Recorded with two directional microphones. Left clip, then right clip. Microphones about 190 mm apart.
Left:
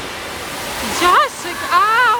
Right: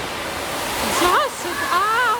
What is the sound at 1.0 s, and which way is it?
Speech, 15° right (ahead or behind).